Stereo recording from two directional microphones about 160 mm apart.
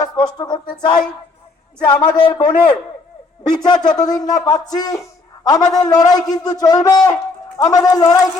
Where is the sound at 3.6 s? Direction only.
25° left (ahead or behind).